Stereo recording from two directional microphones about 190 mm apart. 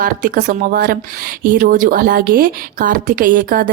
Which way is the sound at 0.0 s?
45° right (ahead or behind).